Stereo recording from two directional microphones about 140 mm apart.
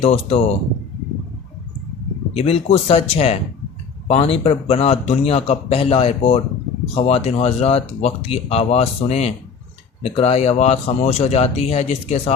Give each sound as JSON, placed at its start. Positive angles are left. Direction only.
{"t": 0.0, "sound": "speech", "side_deg": 45}
{"t": 2.3, "sound": "speech", "side_deg": 45}